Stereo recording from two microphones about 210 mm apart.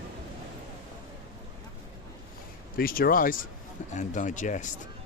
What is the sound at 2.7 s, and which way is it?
Speech, 45° left (ahead or behind).